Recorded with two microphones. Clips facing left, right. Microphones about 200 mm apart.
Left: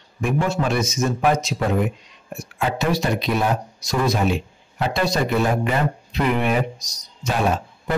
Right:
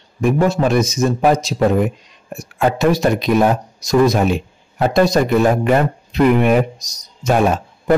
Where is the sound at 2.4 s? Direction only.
45° right (ahead or behind).